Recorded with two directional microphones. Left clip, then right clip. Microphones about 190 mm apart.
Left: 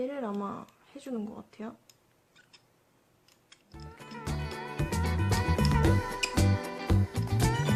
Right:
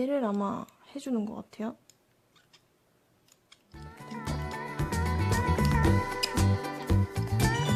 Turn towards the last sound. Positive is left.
turn(degrees=0)  # may be behind; listen again after turning